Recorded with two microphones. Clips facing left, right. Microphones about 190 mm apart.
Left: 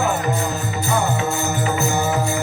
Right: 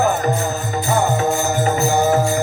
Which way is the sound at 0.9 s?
45° right (ahead or behind).